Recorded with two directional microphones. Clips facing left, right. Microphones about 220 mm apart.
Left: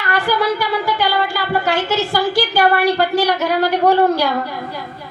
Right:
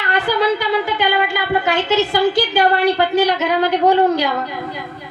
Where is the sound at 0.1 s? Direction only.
20° right (ahead or behind).